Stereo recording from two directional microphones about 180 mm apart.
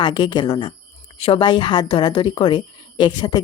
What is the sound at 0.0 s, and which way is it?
A woman's voice, 25° left (ahead or behind).